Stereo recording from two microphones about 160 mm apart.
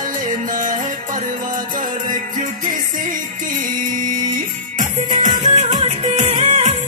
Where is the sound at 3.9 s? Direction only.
55° right (ahead or behind).